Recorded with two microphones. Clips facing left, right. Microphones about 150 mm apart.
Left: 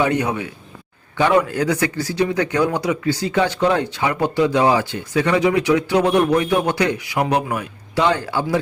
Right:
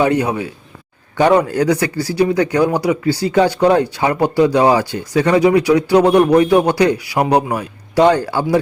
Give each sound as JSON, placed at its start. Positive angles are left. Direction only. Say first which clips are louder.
{"t": 0.0, "sound": "speech", "louder": "right 4 dB", "side_deg": -30}